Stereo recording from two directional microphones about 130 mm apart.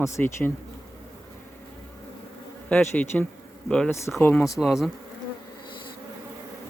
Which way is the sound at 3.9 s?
20° left (ahead or behind).